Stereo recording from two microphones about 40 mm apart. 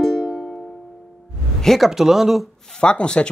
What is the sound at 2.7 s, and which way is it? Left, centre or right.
Speech, left.